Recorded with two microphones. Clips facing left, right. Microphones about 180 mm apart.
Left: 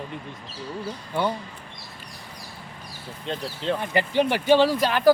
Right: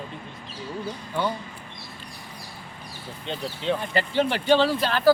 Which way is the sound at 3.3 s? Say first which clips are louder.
Even; centre (ahead or behind).